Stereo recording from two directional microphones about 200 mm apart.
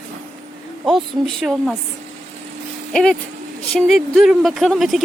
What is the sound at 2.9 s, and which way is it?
Speech, 5° left (ahead or behind).